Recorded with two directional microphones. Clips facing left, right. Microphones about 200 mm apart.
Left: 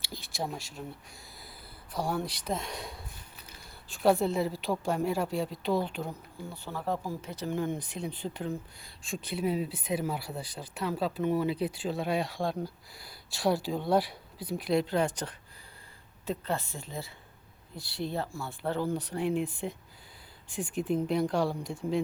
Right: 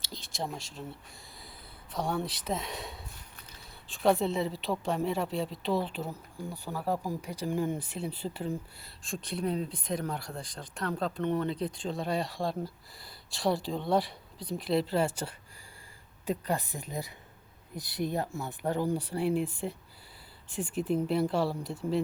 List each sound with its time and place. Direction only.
0.3 s speech: centre (ahead or behind)
1.9 s speech: centre (ahead or behind)
9.0 s speech: 5° left (ahead or behind)
20.9 s speech: 5° right (ahead or behind)